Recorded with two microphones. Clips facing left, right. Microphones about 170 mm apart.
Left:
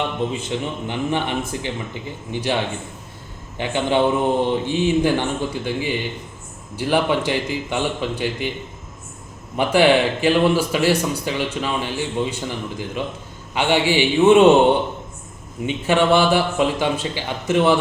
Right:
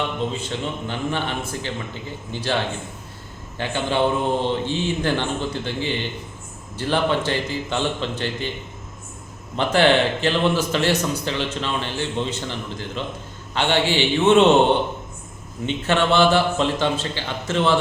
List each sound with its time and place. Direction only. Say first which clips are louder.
0.3 s a man's voice: left 2 dB; 15° left (ahead or behind)
3.6 s a man's voice: left 3 dB; 15° left (ahead or behind)
9.6 s a man's voice: left 2 dB; 10° left (ahead or behind)
15.6 s a man's voice: left 3 dB; 15° left (ahead or behind)